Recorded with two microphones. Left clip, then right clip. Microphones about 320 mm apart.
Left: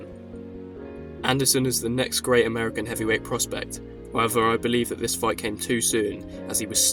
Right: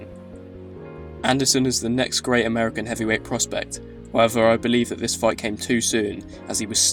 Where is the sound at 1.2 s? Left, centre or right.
Left.